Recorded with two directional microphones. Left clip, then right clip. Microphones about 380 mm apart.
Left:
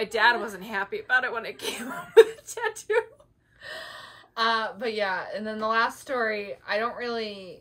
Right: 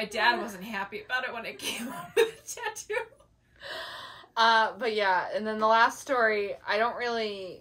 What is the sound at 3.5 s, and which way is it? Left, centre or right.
Speech, centre.